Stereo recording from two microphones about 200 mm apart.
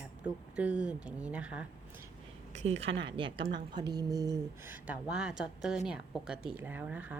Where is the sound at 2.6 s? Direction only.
30° right (ahead or behind).